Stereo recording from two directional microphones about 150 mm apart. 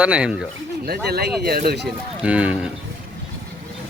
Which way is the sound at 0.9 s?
90° right.